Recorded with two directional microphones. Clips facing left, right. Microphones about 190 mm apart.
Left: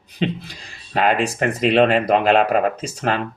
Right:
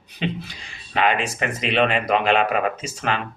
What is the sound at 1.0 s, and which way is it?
Speech, 45° left (ahead or behind).